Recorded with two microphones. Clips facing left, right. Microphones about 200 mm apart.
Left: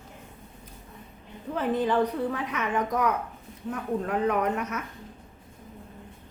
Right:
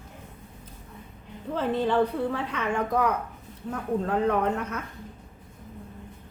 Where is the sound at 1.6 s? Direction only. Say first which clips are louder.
Right 1 dB; 15° left (ahead or behind).